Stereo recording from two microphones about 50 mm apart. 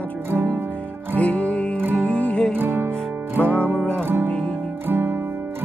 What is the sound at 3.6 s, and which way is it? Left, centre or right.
Music, left.